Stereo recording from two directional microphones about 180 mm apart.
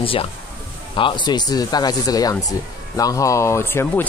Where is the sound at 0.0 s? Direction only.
30° left (ahead or behind).